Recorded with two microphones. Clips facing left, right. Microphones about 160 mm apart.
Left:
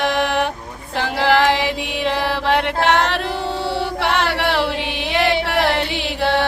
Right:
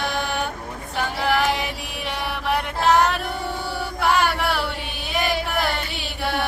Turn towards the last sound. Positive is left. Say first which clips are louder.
# left 6 dB
turn(degrees=70)  # may be behind; listen again after turning